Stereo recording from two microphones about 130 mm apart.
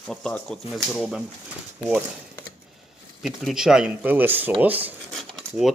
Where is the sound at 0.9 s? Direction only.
10° right (ahead or behind).